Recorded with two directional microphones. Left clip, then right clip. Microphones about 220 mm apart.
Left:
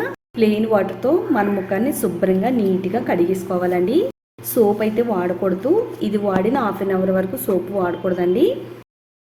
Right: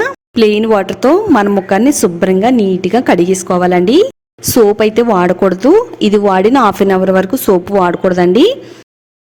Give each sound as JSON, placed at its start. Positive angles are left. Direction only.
{"t": 0.0, "sound": "a woman's voice", "side_deg": -45}